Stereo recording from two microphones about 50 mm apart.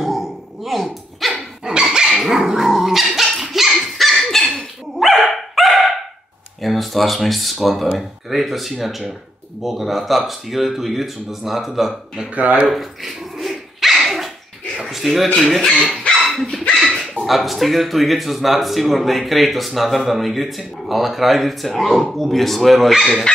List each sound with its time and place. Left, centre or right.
0.0 s dog: centre
1.3 s dog: centre
2.0 s dog: centre
6.6 s a man's voice: centre
12.4 s speech: right
12.6 s dog: centre
14.8 s a sound: centre
15.3 s a man's voice: centre
16.7 s dog: centre
17.3 s a man's voice: centre